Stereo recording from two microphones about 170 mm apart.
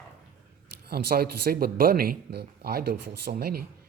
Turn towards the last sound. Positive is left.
turn(degrees=-65)  # may be behind; listen again after turning